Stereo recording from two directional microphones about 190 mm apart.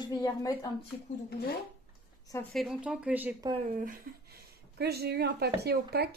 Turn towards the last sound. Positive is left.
turn(degrees=-60)  # may be behind; listen again after turning